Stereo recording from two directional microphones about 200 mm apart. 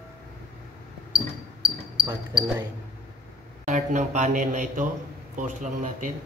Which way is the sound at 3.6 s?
35° right (ahead or behind).